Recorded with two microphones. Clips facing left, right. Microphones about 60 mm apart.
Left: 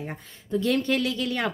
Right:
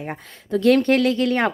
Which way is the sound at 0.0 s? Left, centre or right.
Right.